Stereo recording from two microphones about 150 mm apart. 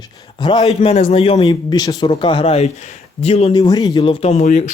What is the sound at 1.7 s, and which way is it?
Speech, 25° left (ahead or behind).